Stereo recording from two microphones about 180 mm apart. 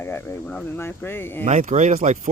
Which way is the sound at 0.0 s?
10° left (ahead or behind).